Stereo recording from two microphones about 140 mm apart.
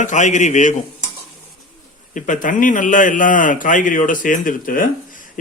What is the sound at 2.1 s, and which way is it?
A man's voice, 70° left (ahead or behind).